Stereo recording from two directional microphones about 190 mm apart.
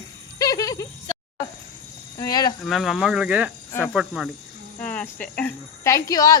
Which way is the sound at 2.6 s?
Centre (ahead or behind).